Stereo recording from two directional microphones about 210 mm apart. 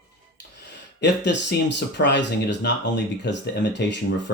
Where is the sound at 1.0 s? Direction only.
55° left (ahead or behind).